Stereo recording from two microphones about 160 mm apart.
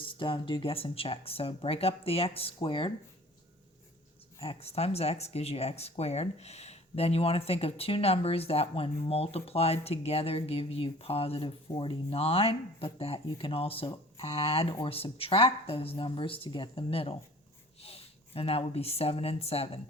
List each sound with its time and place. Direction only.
0.0 s speech: 30° left (ahead or behind)
4.4 s speech: 40° left (ahead or behind)